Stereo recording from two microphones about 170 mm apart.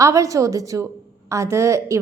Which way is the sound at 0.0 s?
20° right (ahead or behind).